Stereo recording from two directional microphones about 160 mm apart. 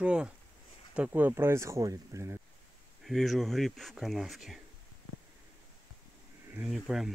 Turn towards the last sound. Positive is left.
turn(degrees=0)  # may be behind; listen again after turning